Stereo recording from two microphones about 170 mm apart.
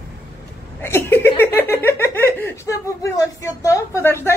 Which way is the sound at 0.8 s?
15° left (ahead or behind).